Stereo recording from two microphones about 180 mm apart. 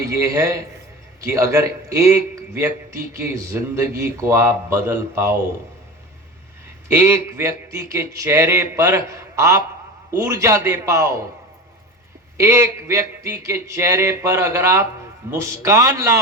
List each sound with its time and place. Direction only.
0.0 s a man's voice: 20° right (ahead or behind)
6.8 s a man's voice: 15° right (ahead or behind)
12.4 s a man's voice: 15° right (ahead or behind)